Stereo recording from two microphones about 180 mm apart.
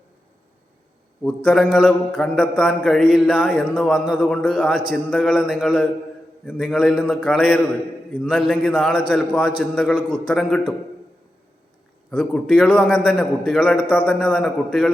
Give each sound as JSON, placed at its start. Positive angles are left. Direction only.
{"t": 1.2, "sound": "mantra", "side_deg": 5}
{"t": 9.1, "sound": "a man's voice", "side_deg": 5}
{"t": 9.7, "sound": "mantra", "side_deg": 0}
{"t": 12.1, "sound": "mantra", "side_deg": 5}
{"t": 12.7, "sound": "a man's voice", "side_deg": 10}
{"t": 13.1, "sound": "mantra", "side_deg": 5}